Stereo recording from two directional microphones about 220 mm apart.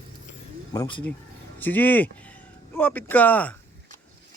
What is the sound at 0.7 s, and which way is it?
Speech, 20° left (ahead or behind).